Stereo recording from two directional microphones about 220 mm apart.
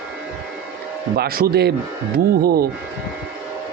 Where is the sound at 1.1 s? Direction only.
45° right (ahead or behind).